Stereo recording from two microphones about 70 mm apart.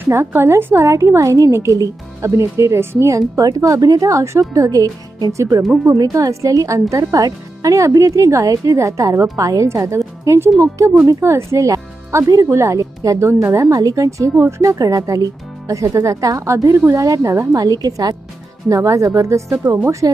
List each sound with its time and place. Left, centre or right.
0.0 s a woman's voice: right
17.5 s a woman's voice: right
18.7 s a woman's voice: right